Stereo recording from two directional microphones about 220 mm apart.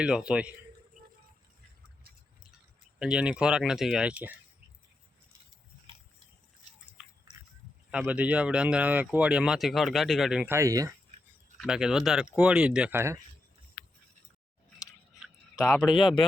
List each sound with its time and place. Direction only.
0.0 s speech: 5° right (ahead or behind)
3.0 s speech: 5° right (ahead or behind)
7.9 s speech: 5° right (ahead or behind)
11.5 s speech: centre (ahead or behind)
15.5 s speech: 10° left (ahead or behind)
16.0 s speech: 20° left (ahead or behind)